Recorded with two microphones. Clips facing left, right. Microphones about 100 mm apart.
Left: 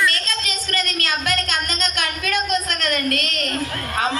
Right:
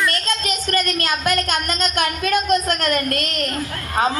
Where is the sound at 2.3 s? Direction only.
45° right (ahead or behind).